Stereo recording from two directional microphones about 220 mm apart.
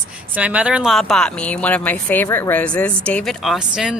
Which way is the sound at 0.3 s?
5° right (ahead or behind).